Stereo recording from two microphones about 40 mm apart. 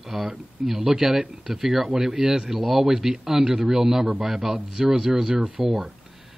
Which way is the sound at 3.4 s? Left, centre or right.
Right.